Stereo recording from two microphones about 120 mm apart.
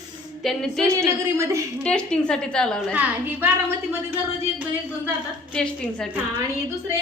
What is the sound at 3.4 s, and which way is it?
Speech, 15° right (ahead or behind).